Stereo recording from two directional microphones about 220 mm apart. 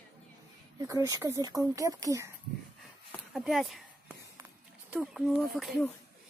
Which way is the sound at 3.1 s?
Centre (ahead or behind).